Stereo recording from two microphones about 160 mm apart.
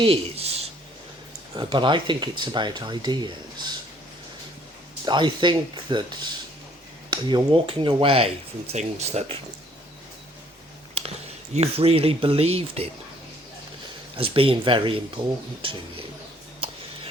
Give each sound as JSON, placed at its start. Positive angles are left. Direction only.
{"t": 0.0, "sound": "a sound", "side_deg": -35}
{"t": 1.5, "sound": "speech", "side_deg": -30}
{"t": 5.0, "sound": "speech", "side_deg": -30}
{"t": 11.0, "sound": "a sound", "side_deg": -35}
{"t": 11.5, "sound": "speech", "side_deg": -40}
{"t": 14.2, "sound": "speech", "side_deg": -35}